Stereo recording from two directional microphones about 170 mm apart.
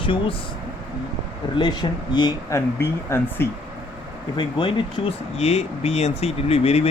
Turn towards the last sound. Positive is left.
turn(degrees=35)  # may be behind; listen again after turning